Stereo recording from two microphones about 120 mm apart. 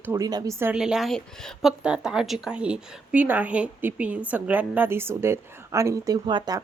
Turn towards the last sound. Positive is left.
turn(degrees=-35)  # may be behind; listen again after turning